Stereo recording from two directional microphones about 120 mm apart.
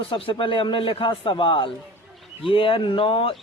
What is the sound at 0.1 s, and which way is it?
Speech, 45° left (ahead or behind).